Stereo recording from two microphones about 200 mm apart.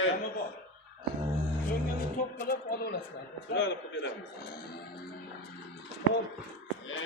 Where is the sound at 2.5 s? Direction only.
50° left (ahead or behind).